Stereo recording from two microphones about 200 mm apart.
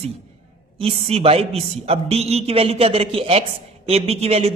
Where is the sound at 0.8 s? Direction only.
30° right (ahead or behind).